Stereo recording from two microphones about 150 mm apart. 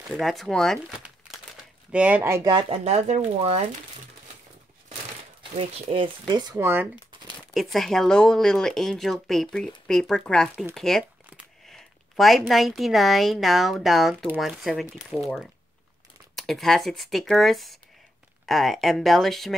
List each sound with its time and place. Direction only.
0.1 s speech: centre (ahead or behind)
1.9 s speech: 10° right (ahead or behind)
2.5 s speech: 40° right (ahead or behind)
5.4 s speech: 35° right (ahead or behind)
6.6 s speech: 15° right (ahead or behind)
7.5 s a woman's voice: centre (ahead or behind)